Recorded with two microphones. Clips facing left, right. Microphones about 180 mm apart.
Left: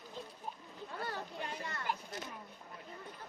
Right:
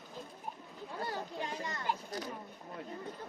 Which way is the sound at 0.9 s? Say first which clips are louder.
Right 3 dB; 15° right (ahead or behind).